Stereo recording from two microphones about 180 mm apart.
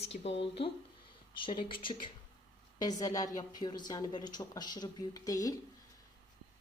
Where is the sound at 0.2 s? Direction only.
35° left (ahead or behind).